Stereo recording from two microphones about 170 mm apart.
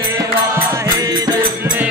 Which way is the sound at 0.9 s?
20° right (ahead or behind).